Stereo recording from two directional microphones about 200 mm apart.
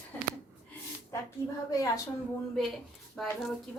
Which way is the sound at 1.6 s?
20° left (ahead or behind).